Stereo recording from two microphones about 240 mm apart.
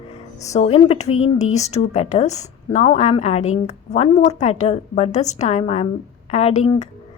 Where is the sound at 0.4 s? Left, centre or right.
Left.